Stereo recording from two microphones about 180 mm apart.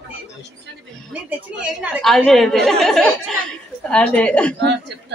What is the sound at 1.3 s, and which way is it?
A woman's voice, 5° right (ahead or behind).